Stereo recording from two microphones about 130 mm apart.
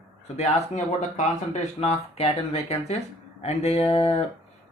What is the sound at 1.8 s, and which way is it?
Speech, 55° left (ahead or behind).